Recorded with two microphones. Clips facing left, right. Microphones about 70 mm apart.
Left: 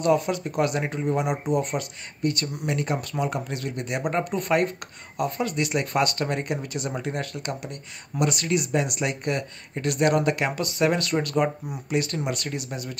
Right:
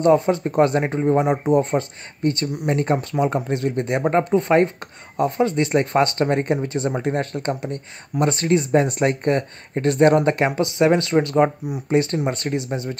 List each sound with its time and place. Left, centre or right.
0.0 s speech: right